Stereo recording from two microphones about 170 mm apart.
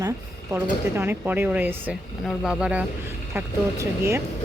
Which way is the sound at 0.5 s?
15° right (ahead or behind).